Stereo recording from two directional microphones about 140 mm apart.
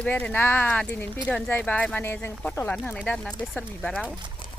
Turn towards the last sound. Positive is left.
turn(degrees=5)  # may be behind; listen again after turning